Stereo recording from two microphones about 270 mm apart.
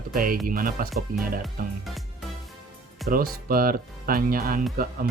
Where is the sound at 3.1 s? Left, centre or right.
Right.